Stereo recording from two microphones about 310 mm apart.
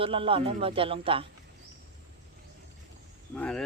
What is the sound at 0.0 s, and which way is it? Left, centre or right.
Speech, centre.